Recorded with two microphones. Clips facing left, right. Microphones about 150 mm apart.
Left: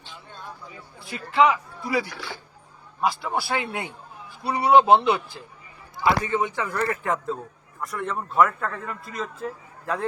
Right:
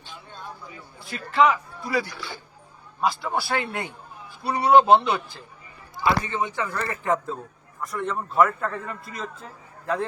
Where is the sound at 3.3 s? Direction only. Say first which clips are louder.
Even; 15° left (ahead or behind).